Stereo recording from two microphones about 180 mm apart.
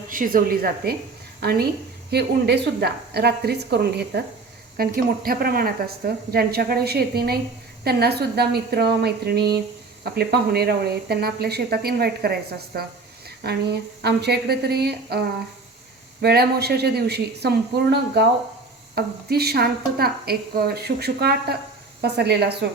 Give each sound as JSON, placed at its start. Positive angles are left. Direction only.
{"t": 0.1, "sound": "speech", "side_deg": -50}
{"t": 16.2, "sound": "speech", "side_deg": -60}